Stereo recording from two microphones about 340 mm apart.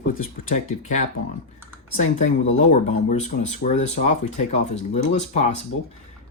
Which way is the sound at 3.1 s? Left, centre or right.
Left.